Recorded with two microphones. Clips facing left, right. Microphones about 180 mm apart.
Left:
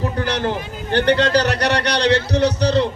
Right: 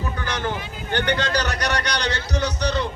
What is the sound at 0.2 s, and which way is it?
A man's voice, 35° left (ahead or behind).